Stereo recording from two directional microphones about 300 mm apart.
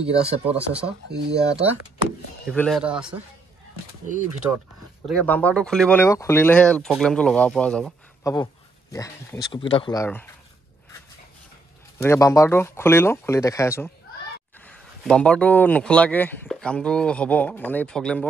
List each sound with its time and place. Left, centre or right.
0.0 s speech: centre
1.0 s speech: right
2.5 s speech: centre
5.0 s speech: centre
12.0 s speech: centre